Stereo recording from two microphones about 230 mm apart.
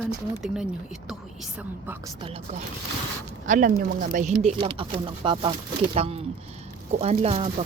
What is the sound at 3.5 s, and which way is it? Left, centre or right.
Speech, right.